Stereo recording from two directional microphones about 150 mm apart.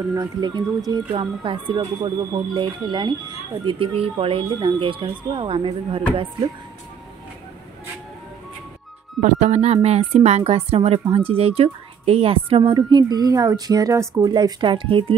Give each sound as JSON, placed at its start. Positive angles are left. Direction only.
{"t": 0.1, "sound": "a woman's voice", "side_deg": -25}
{"t": 9.2, "sound": "a woman's voice", "side_deg": -50}